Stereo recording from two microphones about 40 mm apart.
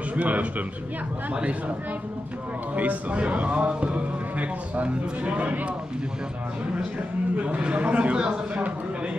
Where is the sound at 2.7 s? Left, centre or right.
Right.